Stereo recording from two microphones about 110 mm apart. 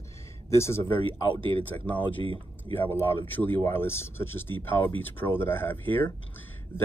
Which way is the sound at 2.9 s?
15° left (ahead or behind).